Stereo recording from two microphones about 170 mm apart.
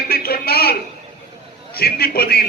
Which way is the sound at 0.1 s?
65° left (ahead or behind).